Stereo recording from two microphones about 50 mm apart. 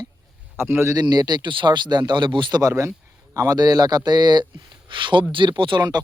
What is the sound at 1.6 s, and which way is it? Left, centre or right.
Speech, right.